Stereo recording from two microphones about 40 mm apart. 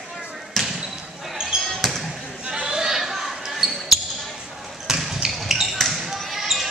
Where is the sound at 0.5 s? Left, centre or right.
Centre.